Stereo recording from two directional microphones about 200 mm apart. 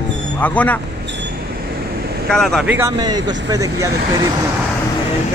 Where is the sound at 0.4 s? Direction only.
5° left (ahead or behind).